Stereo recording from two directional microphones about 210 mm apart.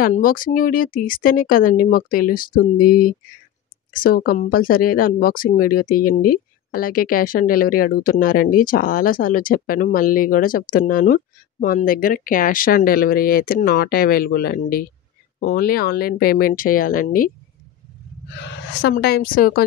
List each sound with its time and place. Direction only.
0.0 s speech: 40° left (ahead or behind)
18.3 s speech: 55° left (ahead or behind)